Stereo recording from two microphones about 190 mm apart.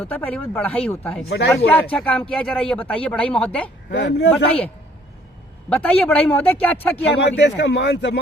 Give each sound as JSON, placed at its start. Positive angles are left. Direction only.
{"t": 0.0, "sound": "speech", "side_deg": 10}
{"t": 3.8, "sound": "speech", "side_deg": 65}
{"t": 5.6, "sound": "speech", "side_deg": 5}
{"t": 7.2, "sound": "speech", "side_deg": 65}